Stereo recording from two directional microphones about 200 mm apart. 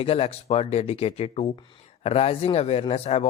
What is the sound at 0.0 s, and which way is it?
Speech, 30° left (ahead or behind).